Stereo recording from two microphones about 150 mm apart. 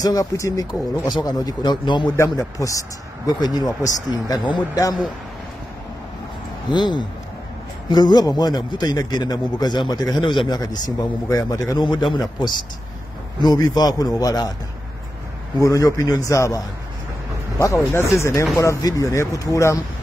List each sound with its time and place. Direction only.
0.0 s a man's voice: 25° left (ahead or behind)
6.7 s a man's voice: 30° left (ahead or behind)
13.4 s a man's voice: 30° left (ahead or behind)
15.6 s a man's voice: 20° left (ahead or behind)
17.9 s a man's voice: 20° left (ahead or behind)